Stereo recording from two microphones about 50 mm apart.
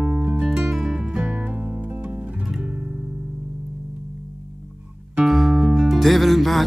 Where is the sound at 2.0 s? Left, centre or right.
Right.